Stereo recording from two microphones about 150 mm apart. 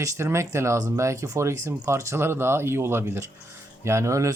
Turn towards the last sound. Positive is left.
turn(degrees=-20)  # may be behind; listen again after turning